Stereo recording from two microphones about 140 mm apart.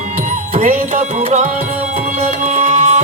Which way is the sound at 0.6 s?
60° right (ahead or behind).